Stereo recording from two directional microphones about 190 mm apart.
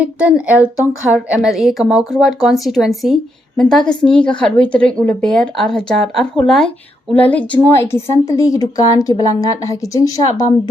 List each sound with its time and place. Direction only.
0.0 s a woman's voice: 5° right (ahead or behind); by 10.5 s 20° left (ahead or behind)